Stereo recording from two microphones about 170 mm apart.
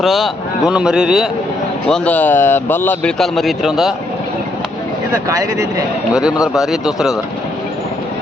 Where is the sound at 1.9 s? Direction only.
10° left (ahead or behind).